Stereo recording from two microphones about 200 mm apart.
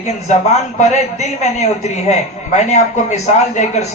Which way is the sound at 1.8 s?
35° left (ahead or behind).